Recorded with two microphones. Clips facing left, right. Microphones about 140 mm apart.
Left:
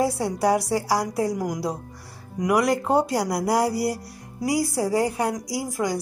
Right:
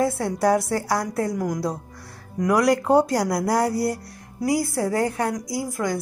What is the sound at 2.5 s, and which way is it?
Speech, centre (ahead or behind).